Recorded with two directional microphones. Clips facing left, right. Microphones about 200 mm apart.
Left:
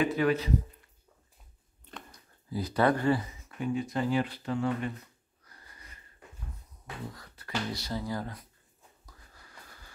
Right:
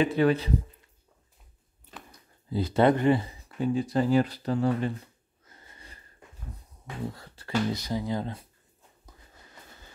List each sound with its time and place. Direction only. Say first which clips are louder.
0.0 s speech: right 3 dB; 30° right (ahead or behind)
2.5 s speech: right 4 dB; 25° right (ahead or behind)
3.3 s a sound: right 4 dB; 35° right (ahead or behind)
7.2 s speech: right 8 dB; 30° right (ahead or behind)
7.8 s speech: right 4 dB; 15° right (ahead or behind)
9.0 s wheeze: right 4 dB; 20° right (ahead or behind)